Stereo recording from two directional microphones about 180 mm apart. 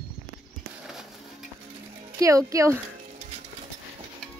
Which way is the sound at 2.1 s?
15° right (ahead or behind).